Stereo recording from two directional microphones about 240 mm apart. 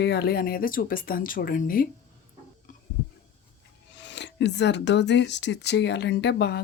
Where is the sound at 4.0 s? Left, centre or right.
Left.